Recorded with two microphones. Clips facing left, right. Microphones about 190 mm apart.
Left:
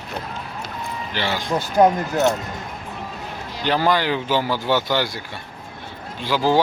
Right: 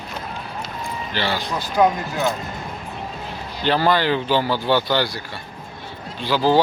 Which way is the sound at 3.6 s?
15° left (ahead or behind).